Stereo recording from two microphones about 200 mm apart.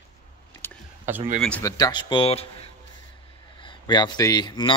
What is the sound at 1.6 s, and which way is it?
Speech, 20° left (ahead or behind).